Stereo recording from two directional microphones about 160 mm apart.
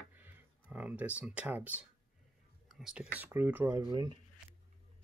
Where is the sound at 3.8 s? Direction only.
25° right (ahead or behind).